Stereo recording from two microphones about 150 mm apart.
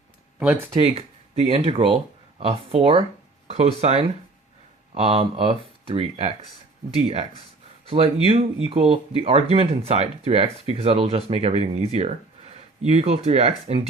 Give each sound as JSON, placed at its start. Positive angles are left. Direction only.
{"t": 0.3, "sound": "speech", "side_deg": -10}
{"t": 0.7, "sound": "speech", "side_deg": -40}
{"t": 7.9, "sound": "speech", "side_deg": -40}